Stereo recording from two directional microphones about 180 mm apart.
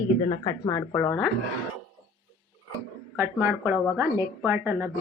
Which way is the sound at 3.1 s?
15° right (ahead or behind).